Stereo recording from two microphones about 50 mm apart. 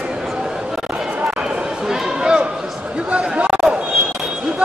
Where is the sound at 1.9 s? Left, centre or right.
Centre.